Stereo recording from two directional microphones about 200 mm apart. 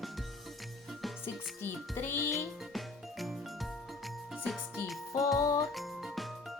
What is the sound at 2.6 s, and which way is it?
Music, centre (ahead or behind).